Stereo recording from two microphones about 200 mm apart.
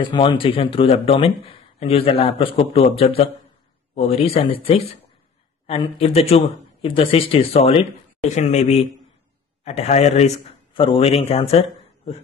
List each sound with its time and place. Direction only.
0.0 s speech: 25° left (ahead or behind)